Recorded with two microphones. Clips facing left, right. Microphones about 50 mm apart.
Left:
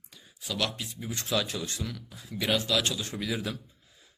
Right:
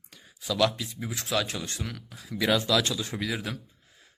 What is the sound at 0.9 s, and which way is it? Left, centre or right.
Speech, right.